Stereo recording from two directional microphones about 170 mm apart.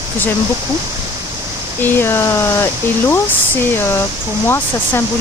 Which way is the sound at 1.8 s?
10° left (ahead or behind).